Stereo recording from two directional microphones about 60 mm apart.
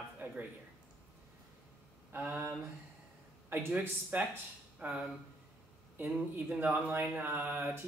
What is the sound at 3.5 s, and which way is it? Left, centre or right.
A man's voice, right.